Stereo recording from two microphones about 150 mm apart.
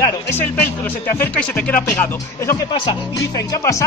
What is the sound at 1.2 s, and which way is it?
Speech, 10° left (ahead or behind).